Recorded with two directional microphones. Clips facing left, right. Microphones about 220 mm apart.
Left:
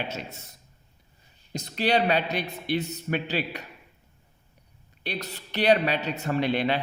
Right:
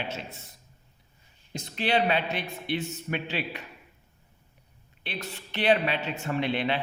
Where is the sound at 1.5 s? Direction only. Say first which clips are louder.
Left 2 dB; 40° left (ahead or behind).